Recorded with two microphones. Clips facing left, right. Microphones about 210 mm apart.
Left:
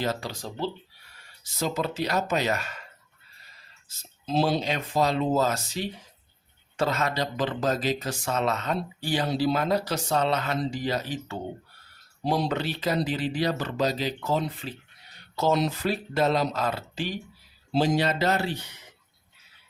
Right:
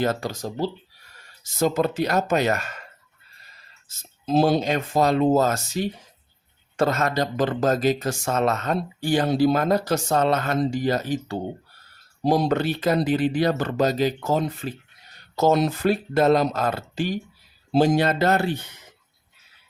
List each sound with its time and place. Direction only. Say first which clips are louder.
0.0 s speech: right 5 dB; 50° right (ahead or behind)
3.8 s speech: right 6 dB; 45° right (ahead or behind)